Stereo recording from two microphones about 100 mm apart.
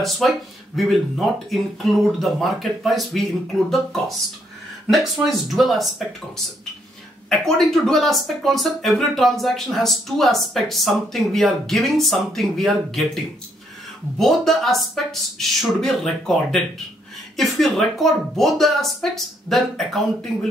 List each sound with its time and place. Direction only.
0.2 s speech: centre (ahead or behind)
4.8 s speech: centre (ahead or behind)